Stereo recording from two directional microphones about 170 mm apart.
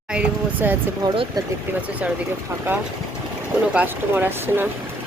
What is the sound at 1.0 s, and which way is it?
Speech, 30° right (ahead or behind).